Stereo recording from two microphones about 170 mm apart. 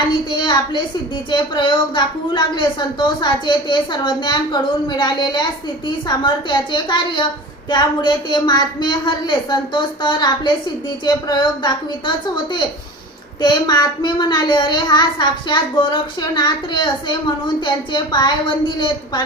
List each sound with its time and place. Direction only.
0.1 s a woman's voice: 30° left (ahead or behind)